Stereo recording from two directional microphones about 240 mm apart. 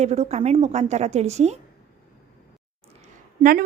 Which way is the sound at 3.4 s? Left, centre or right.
Right.